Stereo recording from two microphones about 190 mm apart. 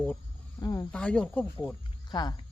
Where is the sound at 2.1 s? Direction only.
20° left (ahead or behind).